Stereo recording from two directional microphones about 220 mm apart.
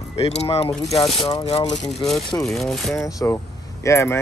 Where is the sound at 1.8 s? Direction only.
Centre (ahead or behind).